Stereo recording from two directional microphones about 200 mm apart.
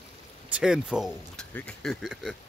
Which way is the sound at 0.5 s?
5° right (ahead or behind).